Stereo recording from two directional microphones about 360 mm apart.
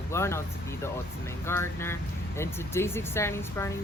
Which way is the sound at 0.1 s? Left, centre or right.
Centre.